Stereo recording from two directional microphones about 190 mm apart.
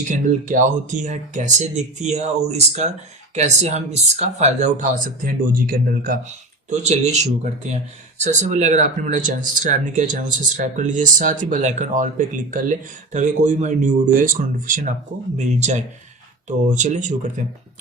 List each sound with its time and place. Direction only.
0.1 s speech: 40° right (ahead or behind)